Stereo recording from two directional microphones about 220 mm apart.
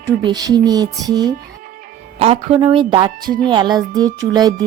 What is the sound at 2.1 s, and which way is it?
A woman's voice, 25° right (ahead or behind).